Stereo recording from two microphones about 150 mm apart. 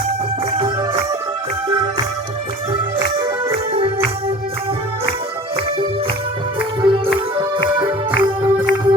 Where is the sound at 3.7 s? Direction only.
40° right (ahead or behind).